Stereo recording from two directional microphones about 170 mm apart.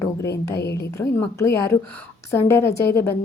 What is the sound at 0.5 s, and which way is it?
Speech, 80° left.